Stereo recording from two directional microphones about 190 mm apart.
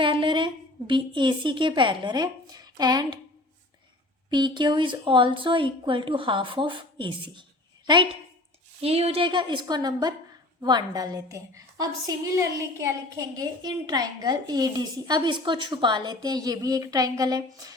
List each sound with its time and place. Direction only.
0.0 s a woman's voice: 25° right (ahead or behind)
4.3 s a woman's voice: 25° right (ahead or behind)
8.8 s a woman's voice: 30° right (ahead or behind)